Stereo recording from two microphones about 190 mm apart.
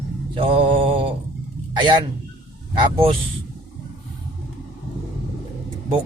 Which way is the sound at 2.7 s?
25° right (ahead or behind).